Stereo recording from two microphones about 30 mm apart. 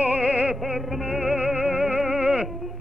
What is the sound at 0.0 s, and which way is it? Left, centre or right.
Music, right.